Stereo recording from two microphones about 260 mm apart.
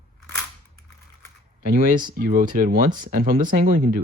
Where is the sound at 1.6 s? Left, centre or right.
Right.